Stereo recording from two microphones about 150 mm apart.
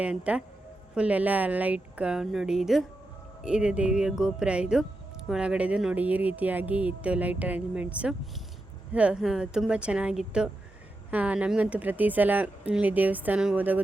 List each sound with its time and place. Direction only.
0.0 s speech: 10° right (ahead or behind)